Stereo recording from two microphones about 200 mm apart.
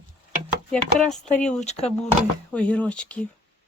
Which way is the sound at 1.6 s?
35° left (ahead or behind).